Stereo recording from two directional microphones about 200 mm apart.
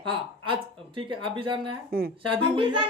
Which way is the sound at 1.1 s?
25° right (ahead or behind).